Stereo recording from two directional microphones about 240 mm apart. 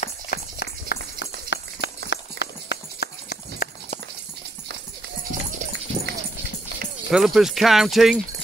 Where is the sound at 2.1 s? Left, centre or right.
Left.